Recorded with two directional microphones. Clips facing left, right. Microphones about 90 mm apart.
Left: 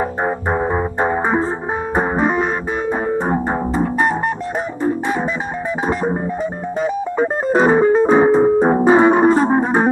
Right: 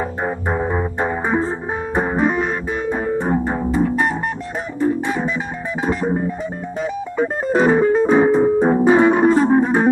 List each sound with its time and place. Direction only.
0.2 s music: 35° left (ahead or behind)
6.8 s music: 35° left (ahead or behind)